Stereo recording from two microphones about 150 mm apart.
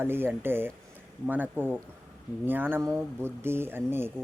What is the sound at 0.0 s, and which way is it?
Speech, 15° right (ahead or behind).